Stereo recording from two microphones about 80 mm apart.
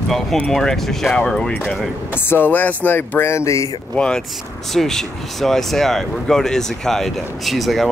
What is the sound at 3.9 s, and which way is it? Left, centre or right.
Speech, centre.